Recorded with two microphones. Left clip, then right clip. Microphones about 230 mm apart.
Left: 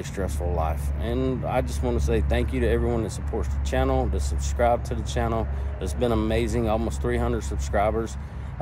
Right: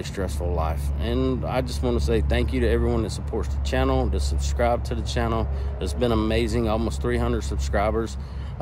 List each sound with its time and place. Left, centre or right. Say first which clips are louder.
0.0 s speech: right 1 dB; centre